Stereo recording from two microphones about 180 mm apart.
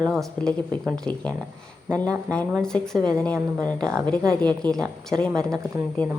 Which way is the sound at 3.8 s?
20° right (ahead or behind).